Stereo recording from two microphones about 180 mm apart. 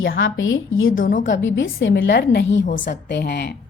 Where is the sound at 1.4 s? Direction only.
90° left.